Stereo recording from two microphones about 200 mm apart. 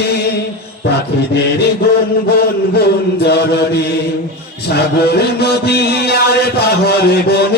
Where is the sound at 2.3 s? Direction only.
55° left (ahead or behind).